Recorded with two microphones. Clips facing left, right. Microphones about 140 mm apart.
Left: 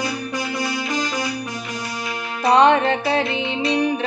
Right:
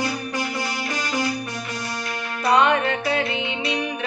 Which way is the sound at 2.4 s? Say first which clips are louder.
Left 4 dB; 30° left (ahead or behind).